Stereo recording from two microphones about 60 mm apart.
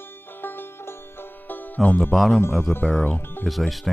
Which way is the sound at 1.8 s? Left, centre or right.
Left.